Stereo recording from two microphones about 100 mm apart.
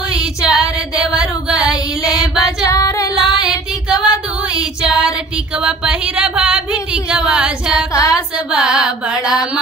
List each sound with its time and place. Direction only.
0.1 s female singing: 10° right (ahead or behind)
2.7 s female singing: 35° left (ahead or behind)
3.3 s female singing: 5° right (ahead or behind)
4.6 s music: 10° right (ahead or behind)
5.6 s a sound: 10° right (ahead or behind)
7.9 s a sound: 35° left (ahead or behind)
8.5 s carnatic music: 10° right (ahead or behind)